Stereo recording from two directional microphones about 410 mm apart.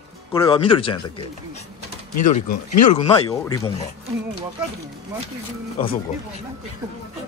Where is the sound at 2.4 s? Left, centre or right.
Left.